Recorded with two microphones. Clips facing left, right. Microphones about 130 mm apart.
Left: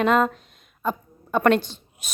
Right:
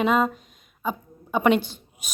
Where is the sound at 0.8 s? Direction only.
10° right (ahead or behind).